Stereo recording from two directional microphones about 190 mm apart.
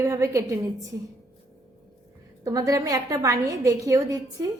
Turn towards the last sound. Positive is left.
turn(degrees=-20)  # may be behind; listen again after turning